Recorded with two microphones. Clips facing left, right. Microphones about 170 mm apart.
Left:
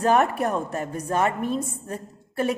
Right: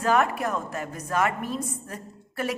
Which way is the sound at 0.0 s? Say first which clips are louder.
Left 3 dB; 35° left (ahead or behind).